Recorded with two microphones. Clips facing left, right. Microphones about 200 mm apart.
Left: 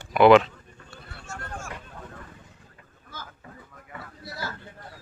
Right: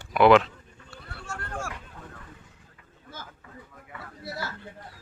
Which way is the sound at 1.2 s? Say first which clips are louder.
Right 3 dB; 60° right (ahead or behind).